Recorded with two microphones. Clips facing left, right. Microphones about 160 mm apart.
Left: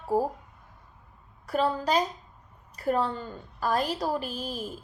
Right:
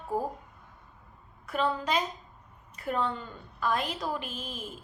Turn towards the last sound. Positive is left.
turn(degrees=35)  # may be behind; listen again after turning